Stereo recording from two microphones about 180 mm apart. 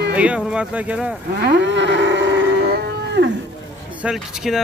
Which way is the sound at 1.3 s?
70° right (ahead or behind).